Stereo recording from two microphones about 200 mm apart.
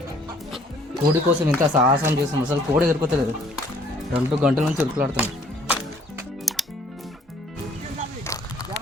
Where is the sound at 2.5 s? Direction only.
5° right (ahead or behind).